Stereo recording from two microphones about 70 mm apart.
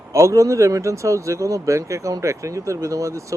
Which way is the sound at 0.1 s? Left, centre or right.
Right.